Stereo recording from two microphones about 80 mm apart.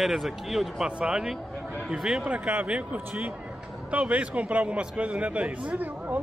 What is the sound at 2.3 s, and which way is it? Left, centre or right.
A man's voice, centre.